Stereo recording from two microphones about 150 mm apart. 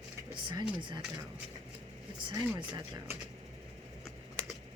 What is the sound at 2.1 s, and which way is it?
Speech, 30° right (ahead or behind).